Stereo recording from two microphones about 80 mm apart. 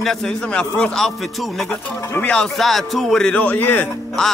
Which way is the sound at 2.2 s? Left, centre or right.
Centre.